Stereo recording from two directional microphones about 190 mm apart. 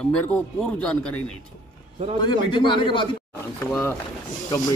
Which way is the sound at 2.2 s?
25° left (ahead or behind).